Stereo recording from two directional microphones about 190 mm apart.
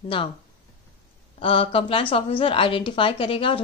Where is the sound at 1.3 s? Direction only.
30° left (ahead or behind).